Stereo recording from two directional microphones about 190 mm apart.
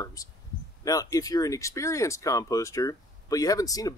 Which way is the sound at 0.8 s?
20° left (ahead or behind).